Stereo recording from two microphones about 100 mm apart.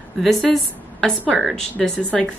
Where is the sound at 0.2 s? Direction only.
Centre (ahead or behind).